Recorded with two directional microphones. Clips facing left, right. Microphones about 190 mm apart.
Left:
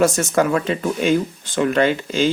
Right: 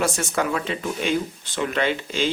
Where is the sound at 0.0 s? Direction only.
45° left (ahead or behind).